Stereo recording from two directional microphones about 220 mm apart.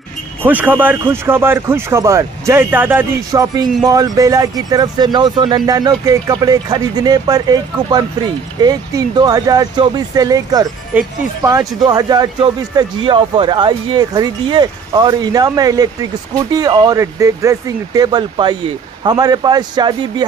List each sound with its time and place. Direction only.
0.4 s a man's voice: 10° right (ahead or behind)